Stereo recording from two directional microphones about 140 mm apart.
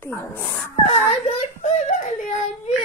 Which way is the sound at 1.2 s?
50° left (ahead or behind).